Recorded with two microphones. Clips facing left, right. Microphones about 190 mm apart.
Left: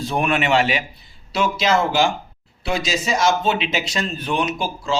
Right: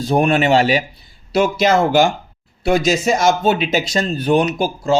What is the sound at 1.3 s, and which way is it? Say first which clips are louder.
A man's voice: right 5 dB; 50° right (ahead or behind).